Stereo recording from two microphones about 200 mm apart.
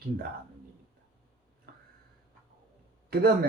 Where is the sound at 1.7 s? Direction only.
55° right (ahead or behind).